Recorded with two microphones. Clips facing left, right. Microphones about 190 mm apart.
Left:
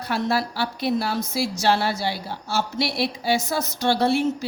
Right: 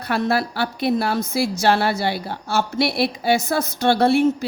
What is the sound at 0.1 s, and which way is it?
A woman's voice, 60° right (ahead or behind).